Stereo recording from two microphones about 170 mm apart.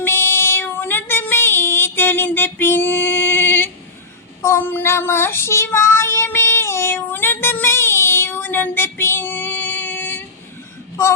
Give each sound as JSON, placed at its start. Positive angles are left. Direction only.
{"t": 0.0, "sound": "child singing", "side_deg": 15}